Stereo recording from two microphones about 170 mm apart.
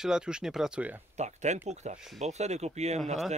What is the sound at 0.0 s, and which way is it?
Speech, 5° right (ahead or behind).